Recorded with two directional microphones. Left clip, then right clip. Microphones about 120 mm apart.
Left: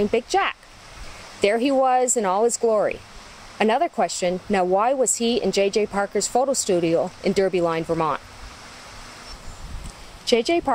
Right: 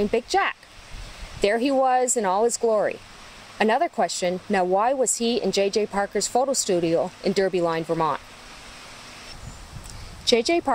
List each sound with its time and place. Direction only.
0.0 s speech: 5° right (ahead or behind)
10.2 s speech: 15° right (ahead or behind)